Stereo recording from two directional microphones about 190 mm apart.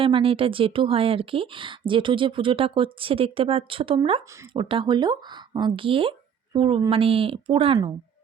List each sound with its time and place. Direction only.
0.0 s a woman's voice: 30° right (ahead or behind)